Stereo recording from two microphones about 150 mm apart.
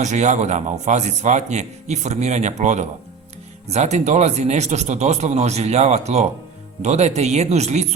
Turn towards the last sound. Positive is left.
turn(degrees=-50)  # may be behind; listen again after turning